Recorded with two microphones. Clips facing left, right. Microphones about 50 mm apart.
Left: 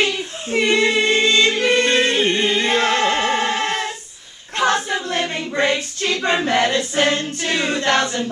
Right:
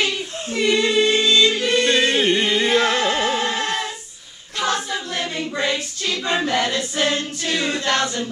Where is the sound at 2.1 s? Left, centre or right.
Centre.